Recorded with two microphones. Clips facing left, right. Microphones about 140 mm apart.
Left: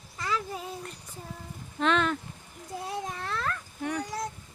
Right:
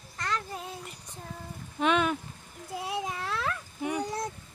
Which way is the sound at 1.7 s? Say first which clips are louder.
Even; 10° right (ahead or behind).